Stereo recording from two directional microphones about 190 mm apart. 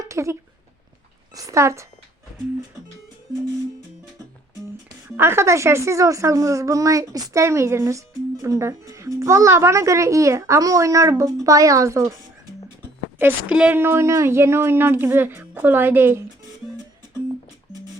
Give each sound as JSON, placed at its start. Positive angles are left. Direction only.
{"t": 0.0, "sound": "a sound", "side_deg": -15}
{"t": 1.4, "sound": "a woman's voice", "side_deg": -15}
{"t": 5.1, "sound": "a woman's voice", "side_deg": -10}
{"t": 13.1, "sound": "a woman's voice", "side_deg": -5}